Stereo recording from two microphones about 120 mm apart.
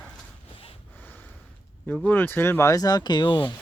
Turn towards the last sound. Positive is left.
turn(degrees=40)  # may be behind; listen again after turning